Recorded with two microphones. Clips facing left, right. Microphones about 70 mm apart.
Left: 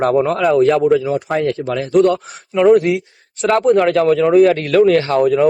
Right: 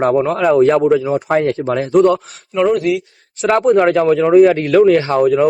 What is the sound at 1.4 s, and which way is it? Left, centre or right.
Speech, right.